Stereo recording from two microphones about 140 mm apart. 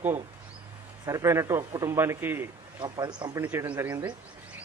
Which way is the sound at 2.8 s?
30° right (ahead or behind).